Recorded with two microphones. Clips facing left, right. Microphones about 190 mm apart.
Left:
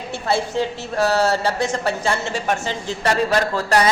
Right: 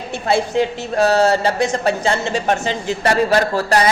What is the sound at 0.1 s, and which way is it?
A woman's voice, 15° right (ahead or behind).